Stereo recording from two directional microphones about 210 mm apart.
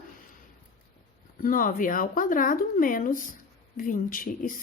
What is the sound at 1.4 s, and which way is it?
Speech, 40° left (ahead or behind).